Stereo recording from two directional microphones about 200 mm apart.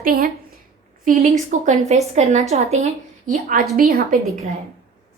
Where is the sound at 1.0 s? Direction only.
35° right (ahead or behind).